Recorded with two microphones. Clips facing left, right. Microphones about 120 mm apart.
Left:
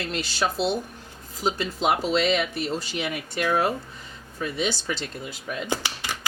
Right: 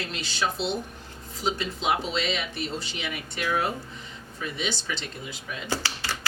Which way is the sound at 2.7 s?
40° left (ahead or behind).